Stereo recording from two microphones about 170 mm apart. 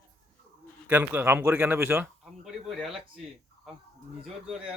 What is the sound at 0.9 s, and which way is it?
A man's voice, 10° right (ahead or behind).